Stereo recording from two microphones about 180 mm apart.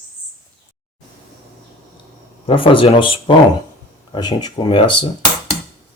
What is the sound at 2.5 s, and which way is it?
Speech, 30° left (ahead or behind).